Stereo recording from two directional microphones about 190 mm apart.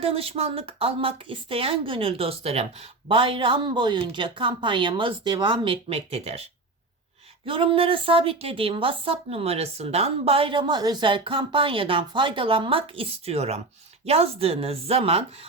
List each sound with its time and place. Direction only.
0.0 s a woman's voice: 30° right (ahead or behind)
7.4 s a woman's voice: 25° right (ahead or behind)